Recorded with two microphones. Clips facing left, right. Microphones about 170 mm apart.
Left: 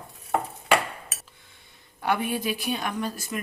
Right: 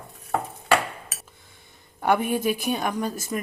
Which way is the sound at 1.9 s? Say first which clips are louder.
Right 4 dB; 50° right (ahead or behind).